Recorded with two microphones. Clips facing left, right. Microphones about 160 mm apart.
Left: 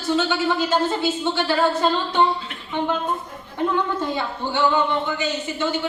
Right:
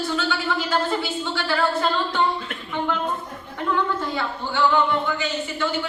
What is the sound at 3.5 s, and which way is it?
A woman's voice, 20° left (ahead or behind).